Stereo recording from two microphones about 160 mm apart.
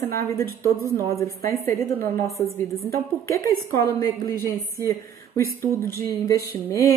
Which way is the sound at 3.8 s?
20° left (ahead or behind).